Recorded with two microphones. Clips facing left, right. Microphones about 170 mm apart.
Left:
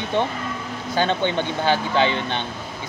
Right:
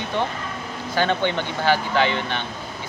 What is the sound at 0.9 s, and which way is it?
Speech, 15° left (ahead or behind).